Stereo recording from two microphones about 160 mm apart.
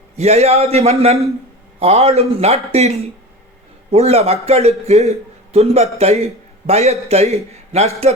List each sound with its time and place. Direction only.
0.2 s a man's voice: 40° right (ahead or behind)